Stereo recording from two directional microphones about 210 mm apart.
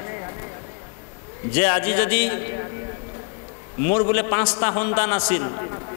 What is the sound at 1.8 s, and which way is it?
Speech, 10° left (ahead or behind).